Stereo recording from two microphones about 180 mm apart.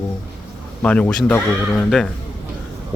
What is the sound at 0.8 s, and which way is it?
Speech, 5° left (ahead or behind).